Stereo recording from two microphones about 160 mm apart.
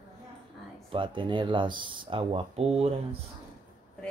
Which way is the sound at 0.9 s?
30° right (ahead or behind).